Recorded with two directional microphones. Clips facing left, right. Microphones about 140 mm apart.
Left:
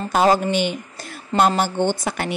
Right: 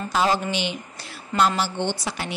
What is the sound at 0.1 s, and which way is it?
A woman's voice, 50° left (ahead or behind).